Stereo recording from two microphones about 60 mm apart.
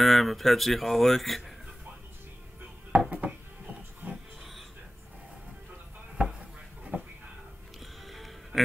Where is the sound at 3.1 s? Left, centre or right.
Right.